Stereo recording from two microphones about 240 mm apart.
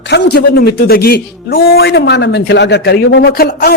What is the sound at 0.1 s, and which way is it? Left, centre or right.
A man's voice, left.